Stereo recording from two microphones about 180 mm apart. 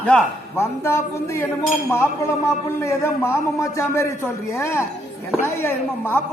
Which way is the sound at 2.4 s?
15° left (ahead or behind).